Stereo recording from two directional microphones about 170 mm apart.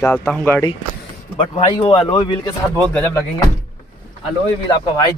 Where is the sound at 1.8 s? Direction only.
25° left (ahead or behind).